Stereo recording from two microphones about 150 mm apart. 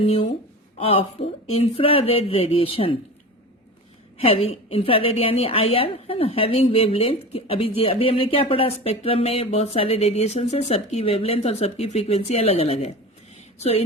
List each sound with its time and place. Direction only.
0.0 s speech: 40° left (ahead or behind)
4.2 s speech: 40° left (ahead or behind)
13.3 s a sound: 45° left (ahead or behind)